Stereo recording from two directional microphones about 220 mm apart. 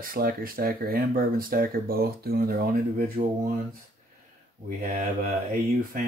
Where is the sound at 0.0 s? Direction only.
40° right (ahead or behind).